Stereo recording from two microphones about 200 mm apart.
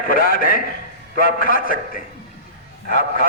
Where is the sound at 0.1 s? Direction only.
45° left (ahead or behind).